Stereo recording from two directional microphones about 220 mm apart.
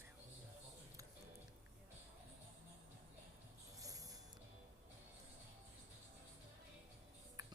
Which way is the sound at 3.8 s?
15° right (ahead or behind).